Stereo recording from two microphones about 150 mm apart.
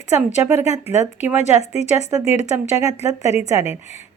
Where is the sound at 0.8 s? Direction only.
50° left (ahead or behind).